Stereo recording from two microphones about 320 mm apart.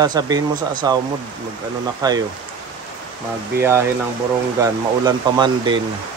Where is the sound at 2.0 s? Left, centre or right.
Centre.